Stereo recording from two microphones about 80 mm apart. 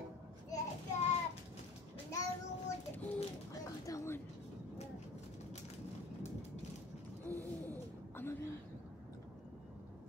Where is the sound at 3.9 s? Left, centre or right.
Left.